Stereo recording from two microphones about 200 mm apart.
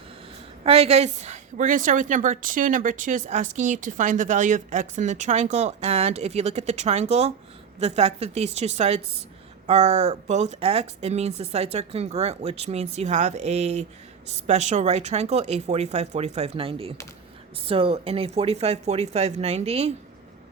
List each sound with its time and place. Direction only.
0.6 s a woman's voice: 30° right (ahead or behind)